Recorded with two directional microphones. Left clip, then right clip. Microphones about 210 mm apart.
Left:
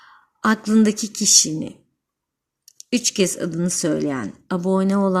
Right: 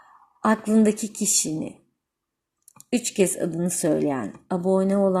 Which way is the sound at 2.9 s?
50° left (ahead or behind).